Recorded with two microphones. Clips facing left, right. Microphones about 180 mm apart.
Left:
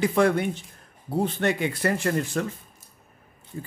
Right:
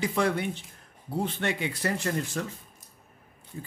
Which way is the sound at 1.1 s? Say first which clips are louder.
Left 5 dB; 40° left (ahead or behind).